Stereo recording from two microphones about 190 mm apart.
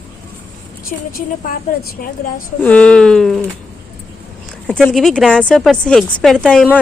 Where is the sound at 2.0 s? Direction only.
50° left (ahead or behind).